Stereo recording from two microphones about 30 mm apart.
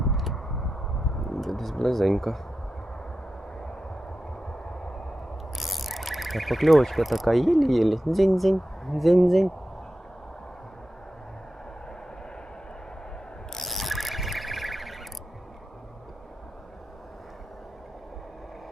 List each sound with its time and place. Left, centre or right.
0.1 s vehicle: centre
1.3 s speech: centre
4.4 s vehicle: left
5.5 s speech: centre
13.7 s ratchet: centre